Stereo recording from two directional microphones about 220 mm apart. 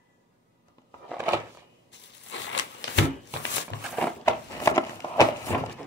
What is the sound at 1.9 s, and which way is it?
Crushing, 55° left (ahead or behind).